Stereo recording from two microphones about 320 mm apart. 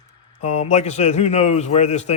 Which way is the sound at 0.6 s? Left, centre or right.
Left.